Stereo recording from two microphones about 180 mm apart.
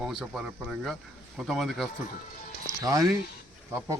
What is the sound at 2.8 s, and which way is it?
Speech, 20° right (ahead or behind).